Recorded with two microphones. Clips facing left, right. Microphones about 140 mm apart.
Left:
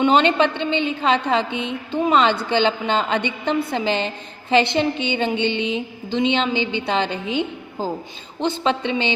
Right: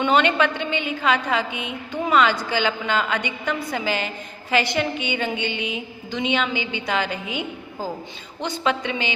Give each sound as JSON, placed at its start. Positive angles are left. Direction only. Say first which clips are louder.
{"t": 0.0, "sound": "a woman's voice", "louder": "left 3 dB", "side_deg": 25}